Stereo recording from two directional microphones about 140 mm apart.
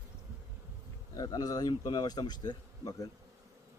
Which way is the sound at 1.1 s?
25° left (ahead or behind).